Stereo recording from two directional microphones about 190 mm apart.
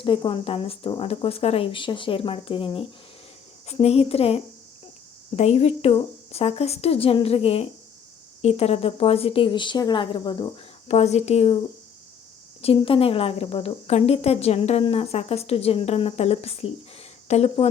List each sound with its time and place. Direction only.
0.0 s speech: 25° left (ahead or behind)
12.6 s speech: 30° left (ahead or behind)